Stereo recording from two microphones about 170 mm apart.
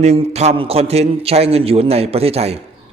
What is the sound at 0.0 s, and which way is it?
Speech, 40° right (ahead or behind).